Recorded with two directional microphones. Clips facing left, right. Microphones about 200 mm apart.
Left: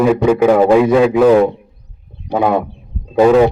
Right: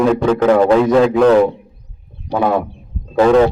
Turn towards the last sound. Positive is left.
turn(degrees=10)  # may be behind; listen again after turning